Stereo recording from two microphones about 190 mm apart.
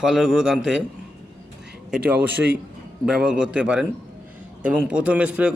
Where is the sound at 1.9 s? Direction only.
5° right (ahead or behind).